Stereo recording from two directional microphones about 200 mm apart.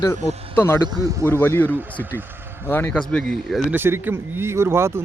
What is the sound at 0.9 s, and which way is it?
Speech, 15° right (ahead or behind).